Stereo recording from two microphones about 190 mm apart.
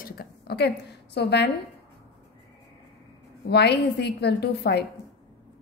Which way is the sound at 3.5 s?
60° left (ahead or behind).